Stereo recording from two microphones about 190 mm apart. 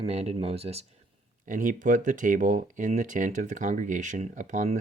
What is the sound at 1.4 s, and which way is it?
Speech, 45° right (ahead or behind).